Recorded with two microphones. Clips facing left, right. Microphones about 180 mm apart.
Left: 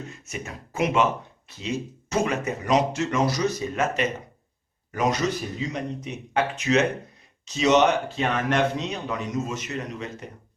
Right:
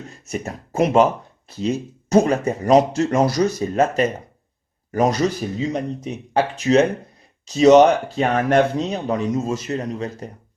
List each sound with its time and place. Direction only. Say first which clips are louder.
0.3 s speech: right 12 dB; 40° right (ahead or behind)
3.2 s speech: right 5 dB; 50° right (ahead or behind)
3.8 s speech: right 10 dB; 35° right (ahead or behind)